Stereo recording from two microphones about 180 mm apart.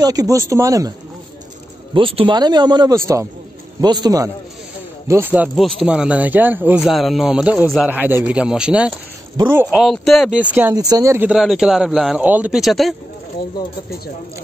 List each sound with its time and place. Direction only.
0.0 s speech: 20° right (ahead or behind)
2.0 s speech: 30° right (ahead or behind); by 10.7 s 10° right (ahead or behind)
10.7 s speech: 20° right (ahead or behind); by 12.9 s centre (ahead or behind)